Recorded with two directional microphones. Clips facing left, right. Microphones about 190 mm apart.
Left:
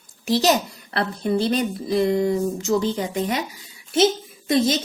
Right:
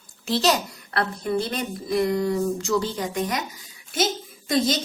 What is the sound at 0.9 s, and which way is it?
A woman's voice, 30° left (ahead or behind).